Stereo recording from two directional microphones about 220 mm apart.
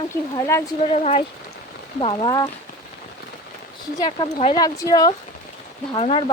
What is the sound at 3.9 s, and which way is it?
Speech, 20° left (ahead or behind).